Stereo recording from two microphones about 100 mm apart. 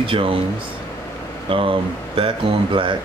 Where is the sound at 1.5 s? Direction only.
60° right (ahead or behind).